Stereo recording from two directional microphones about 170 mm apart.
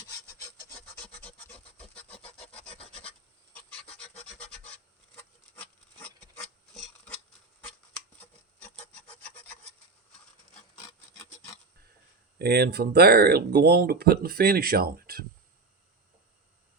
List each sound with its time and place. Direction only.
0.7 s rub: 5° left (ahead or behind)
3.1 s filing: 5° left (ahead or behind)
4.3 s rub: 5° left (ahead or behind)
8.2 s rub: 5° left (ahead or behind)
12.4 s speech: 70° right (ahead or behind)